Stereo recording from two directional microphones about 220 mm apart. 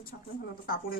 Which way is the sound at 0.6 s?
40° left (ahead or behind).